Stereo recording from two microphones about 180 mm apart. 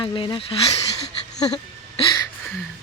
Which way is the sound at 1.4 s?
25° left (ahead or behind).